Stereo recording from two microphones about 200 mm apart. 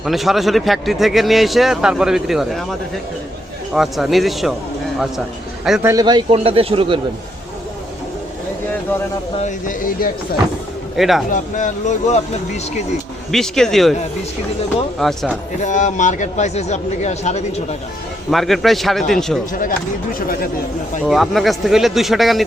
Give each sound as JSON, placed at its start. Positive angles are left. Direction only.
{"t": 0.0, "sound": "a man's voice", "side_deg": 0}
{"t": 5.8, "sound": "speech", "side_deg": -15}
{"t": 9.4, "sound": "speech", "side_deg": 40}
{"t": 10.9, "sound": "a man's voice", "side_deg": 0}
{"t": 11.3, "sound": "speech", "side_deg": 40}
{"t": 13.3, "sound": "a man's voice", "side_deg": 0}
{"t": 14.9, "sound": "a man's voice", "side_deg": 0}
{"t": 15.6, "sound": "speech", "side_deg": 40}
{"t": 18.3, "sound": "a man's voice", "side_deg": 0}
{"t": 21.0, "sound": "a man's voice", "side_deg": 0}